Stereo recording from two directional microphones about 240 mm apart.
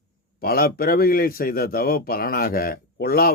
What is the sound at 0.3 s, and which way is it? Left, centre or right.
Speech, left.